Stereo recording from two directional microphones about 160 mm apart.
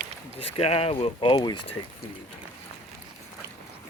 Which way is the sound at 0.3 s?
35° left (ahead or behind).